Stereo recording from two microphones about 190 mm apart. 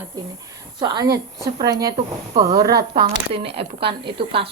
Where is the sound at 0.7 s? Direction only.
20° right (ahead or behind).